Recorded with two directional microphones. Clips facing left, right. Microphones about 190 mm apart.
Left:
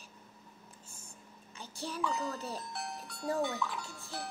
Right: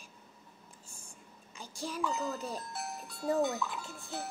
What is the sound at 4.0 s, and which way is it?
Music, 20° right (ahead or behind).